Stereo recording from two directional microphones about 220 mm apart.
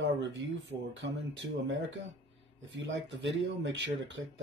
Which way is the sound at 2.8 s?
55° right (ahead or behind).